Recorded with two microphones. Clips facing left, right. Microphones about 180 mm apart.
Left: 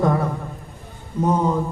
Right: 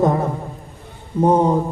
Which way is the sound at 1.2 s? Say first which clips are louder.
Right 5 dB; 30° right (ahead or behind).